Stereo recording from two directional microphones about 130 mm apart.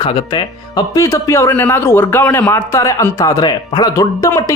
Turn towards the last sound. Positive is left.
turn(degrees=25)  # may be behind; listen again after turning